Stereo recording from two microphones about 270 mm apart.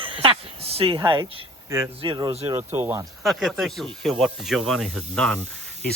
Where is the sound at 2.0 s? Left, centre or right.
Centre.